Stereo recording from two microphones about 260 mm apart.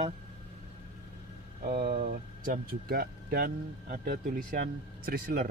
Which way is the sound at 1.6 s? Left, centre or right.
Right.